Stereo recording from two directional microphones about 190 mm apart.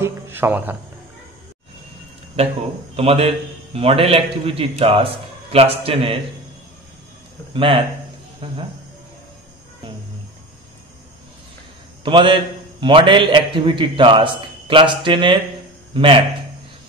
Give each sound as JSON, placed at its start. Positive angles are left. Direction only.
{"t": 0.0, "sound": "a sound", "side_deg": -10}
{"t": 2.4, "sound": "a man's voice", "side_deg": -35}
{"t": 7.5, "sound": "a man's voice", "side_deg": -25}
{"t": 12.0, "sound": "a man's voice", "side_deg": -25}